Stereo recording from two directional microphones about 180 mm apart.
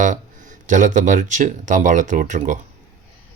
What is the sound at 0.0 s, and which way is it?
Speech, 45° right (ahead or behind).